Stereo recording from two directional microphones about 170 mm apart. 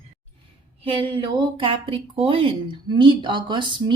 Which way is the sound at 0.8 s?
30° right (ahead or behind).